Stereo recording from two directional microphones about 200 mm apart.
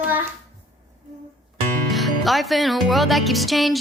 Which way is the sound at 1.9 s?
Centre (ahead or behind).